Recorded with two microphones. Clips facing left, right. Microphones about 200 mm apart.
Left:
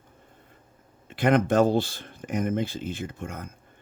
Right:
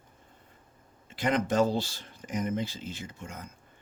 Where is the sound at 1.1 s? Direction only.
60° left (ahead or behind).